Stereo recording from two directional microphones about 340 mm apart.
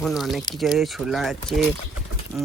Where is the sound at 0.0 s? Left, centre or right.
Centre.